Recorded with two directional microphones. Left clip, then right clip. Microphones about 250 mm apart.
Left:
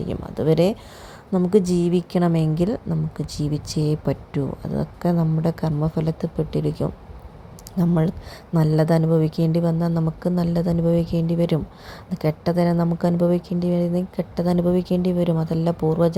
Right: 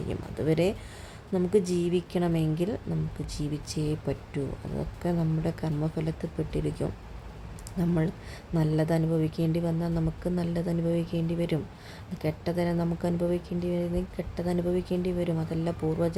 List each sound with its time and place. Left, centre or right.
0.1 s a woman's voice: centre